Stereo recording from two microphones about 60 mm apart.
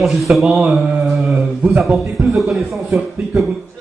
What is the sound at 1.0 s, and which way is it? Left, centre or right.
Speech, centre.